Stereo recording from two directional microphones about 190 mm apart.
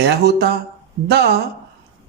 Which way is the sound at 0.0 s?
60° right (ahead or behind).